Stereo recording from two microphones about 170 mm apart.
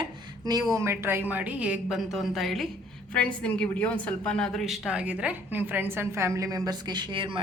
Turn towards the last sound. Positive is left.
turn(degrees=-30)  # may be behind; listen again after turning